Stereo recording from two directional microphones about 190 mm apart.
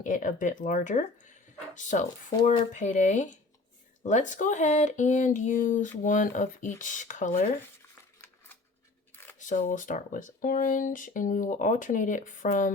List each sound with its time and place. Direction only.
0.0 s speech: 45° left (ahead or behind)
9.4 s speech: 40° left (ahead or behind)